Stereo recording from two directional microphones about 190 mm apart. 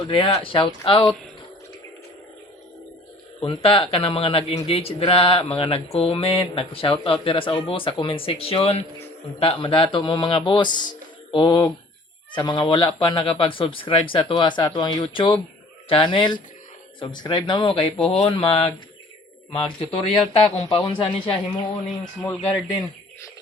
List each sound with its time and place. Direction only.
0.1 s speech: 30° left (ahead or behind)
3.4 s speech: 30° left (ahead or behind)